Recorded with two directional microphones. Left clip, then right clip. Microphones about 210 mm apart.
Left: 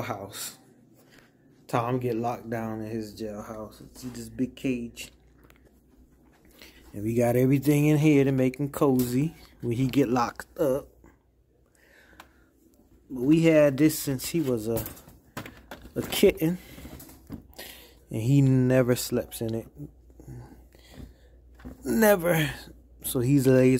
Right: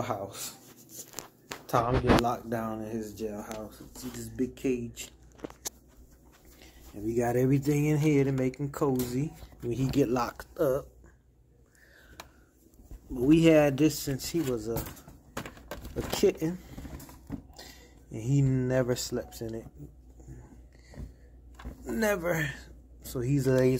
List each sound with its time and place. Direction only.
0.0 s speech: 20° left (ahead or behind)
2.2 s speech: 25° left (ahead or behind)
7.2 s speech: 35° left (ahead or behind)
13.1 s speech: 15° left (ahead or behind); by 14.7 s 35° left (ahead or behind)
16.1 s speech: 35° left (ahead or behind)
21.8 s a man's voice: 45° left (ahead or behind)